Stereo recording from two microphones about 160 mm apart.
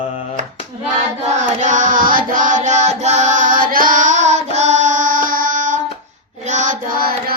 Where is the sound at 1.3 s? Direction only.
45° right (ahead or behind).